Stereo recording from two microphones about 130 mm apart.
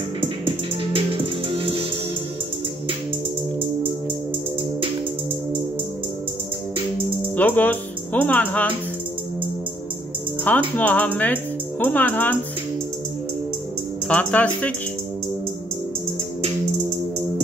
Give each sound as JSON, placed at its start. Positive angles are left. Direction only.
{"t": 0.9, "sound": "music", "side_deg": -45}
{"t": 7.3, "sound": "speech", "side_deg": 15}
{"t": 10.5, "sound": "speech", "side_deg": 15}
{"t": 14.0, "sound": "speech", "side_deg": 10}